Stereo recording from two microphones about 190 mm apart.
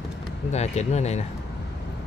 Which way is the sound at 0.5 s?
35° left (ahead or behind).